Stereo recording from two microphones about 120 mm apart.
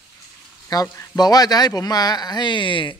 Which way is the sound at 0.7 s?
35° left (ahead or behind).